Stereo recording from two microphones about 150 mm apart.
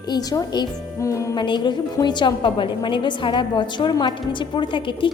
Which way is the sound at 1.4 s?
30° left (ahead or behind).